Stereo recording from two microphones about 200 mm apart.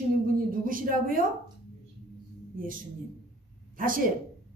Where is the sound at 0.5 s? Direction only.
45° right (ahead or behind).